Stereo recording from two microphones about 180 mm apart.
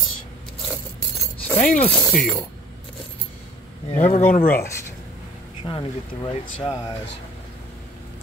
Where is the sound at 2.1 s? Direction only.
Centre (ahead or behind).